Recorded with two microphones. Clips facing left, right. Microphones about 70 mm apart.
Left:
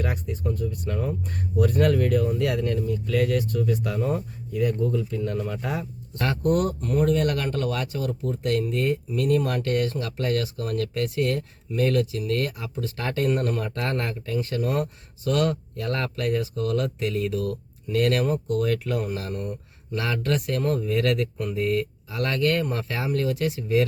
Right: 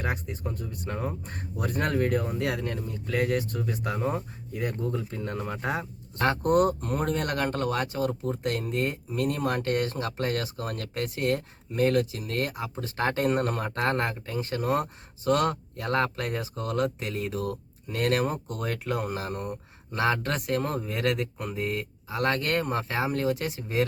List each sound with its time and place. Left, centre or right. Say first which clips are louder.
0.0 s speech: left 3 dB; right